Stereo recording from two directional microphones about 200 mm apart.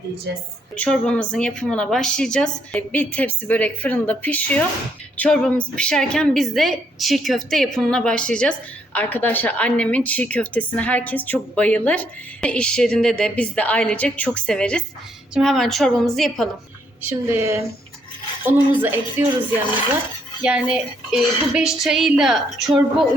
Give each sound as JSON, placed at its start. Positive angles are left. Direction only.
{"t": 0.8, "sound": "a woman's voice", "side_deg": 5}
{"t": 17.0, "sound": "speech", "side_deg": -10}
{"t": 20.4, "sound": "a woman's voice", "side_deg": -5}